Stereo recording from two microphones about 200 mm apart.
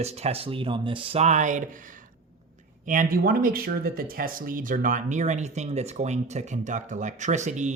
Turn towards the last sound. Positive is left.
turn(degrees=-35)  # may be behind; listen again after turning